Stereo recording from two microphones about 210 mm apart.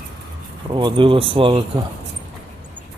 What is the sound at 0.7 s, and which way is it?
Speech, 20° right (ahead or behind).